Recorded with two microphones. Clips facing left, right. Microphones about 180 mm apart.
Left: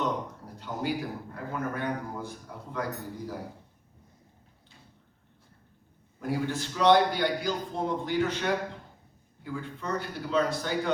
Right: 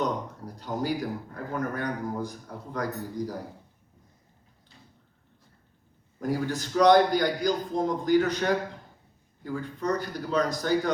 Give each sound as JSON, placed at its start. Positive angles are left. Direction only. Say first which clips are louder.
{"t": 0.0, "sound": "a man's voice", "louder": "right 2 dB", "side_deg": -40}
{"t": 6.1, "sound": "a man's voice", "louder": "right 2 dB", "side_deg": -40}